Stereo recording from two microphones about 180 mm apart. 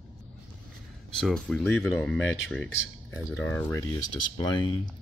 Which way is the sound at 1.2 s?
Centre (ahead or behind).